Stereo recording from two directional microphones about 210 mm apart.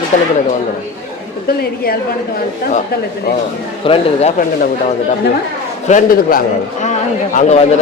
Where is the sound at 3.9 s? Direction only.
25° left (ahead or behind).